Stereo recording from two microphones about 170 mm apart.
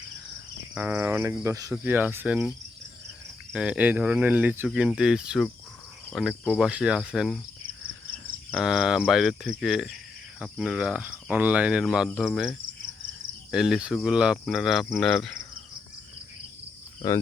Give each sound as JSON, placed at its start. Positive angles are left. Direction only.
{"t": 0.7, "sound": "speech", "side_deg": -10}
{"t": 3.5, "sound": "speech", "side_deg": -5}
{"t": 6.1, "sound": "cricket", "side_deg": -5}
{"t": 8.5, "sound": "cricket", "side_deg": -5}
{"t": 10.4, "sound": "speech", "side_deg": -5}
{"t": 12.0, "sound": "cricket", "side_deg": 0}